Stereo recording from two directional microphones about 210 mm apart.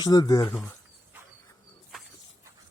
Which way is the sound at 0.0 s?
20° left (ahead or behind).